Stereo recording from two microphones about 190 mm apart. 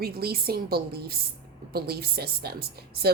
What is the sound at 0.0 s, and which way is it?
A woman's voice, 55° right (ahead or behind).